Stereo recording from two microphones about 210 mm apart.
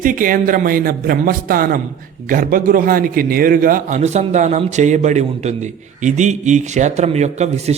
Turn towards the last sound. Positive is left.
turn(degrees=-30)  # may be behind; listen again after turning